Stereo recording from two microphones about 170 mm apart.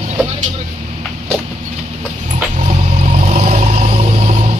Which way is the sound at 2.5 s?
40° right (ahead or behind).